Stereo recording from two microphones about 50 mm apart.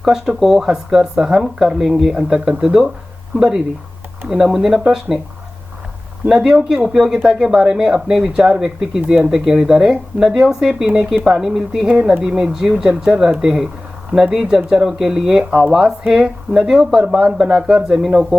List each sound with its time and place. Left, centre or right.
0.0 s speech: centre
6.2 s speech: centre